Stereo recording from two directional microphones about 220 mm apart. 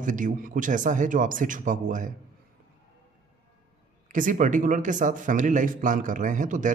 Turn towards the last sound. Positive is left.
turn(degrees=-35)  # may be behind; listen again after turning